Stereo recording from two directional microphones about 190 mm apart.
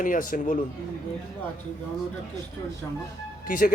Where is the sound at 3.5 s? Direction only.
45° left (ahead or behind).